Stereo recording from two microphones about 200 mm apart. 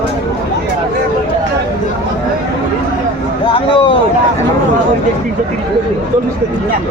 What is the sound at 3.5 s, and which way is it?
Speech, 25° left (ahead or behind).